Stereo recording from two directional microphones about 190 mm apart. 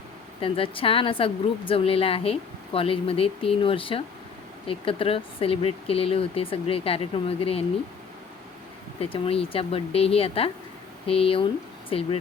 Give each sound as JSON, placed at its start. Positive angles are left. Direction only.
{"t": 0.4, "sound": "a woman's voice", "side_deg": 30}
{"t": 9.0, "sound": "a woman's voice", "side_deg": 30}